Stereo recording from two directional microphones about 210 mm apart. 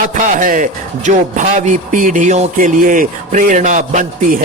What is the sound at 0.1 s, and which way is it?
A man's voice, 35° right (ahead or behind).